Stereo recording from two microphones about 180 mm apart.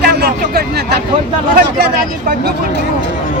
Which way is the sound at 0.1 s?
60° right (ahead or behind).